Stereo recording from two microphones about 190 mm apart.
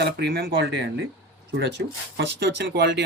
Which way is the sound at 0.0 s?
60° right (ahead or behind).